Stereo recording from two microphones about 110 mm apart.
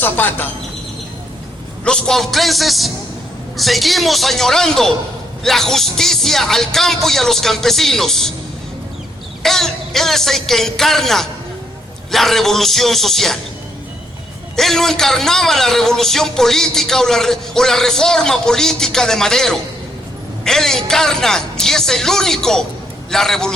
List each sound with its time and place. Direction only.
0.0 s speech: 15° left (ahead or behind)
1.8 s a man's voice: 5° left (ahead or behind)
9.4 s a man's voice: 5° left (ahead or behind)
14.5 s a man's voice: 5° left (ahead or behind)